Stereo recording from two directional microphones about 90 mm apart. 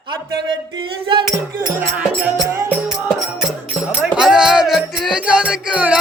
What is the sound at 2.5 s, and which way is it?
Music, 25° right (ahead or behind).